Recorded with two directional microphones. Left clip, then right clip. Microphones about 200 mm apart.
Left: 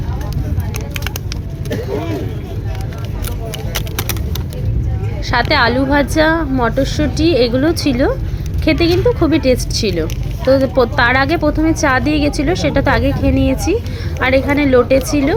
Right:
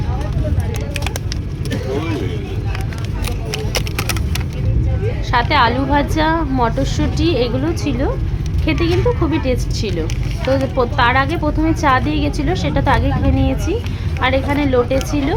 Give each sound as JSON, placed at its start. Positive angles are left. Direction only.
{"t": 5.3, "sound": "a woman's voice", "side_deg": 25}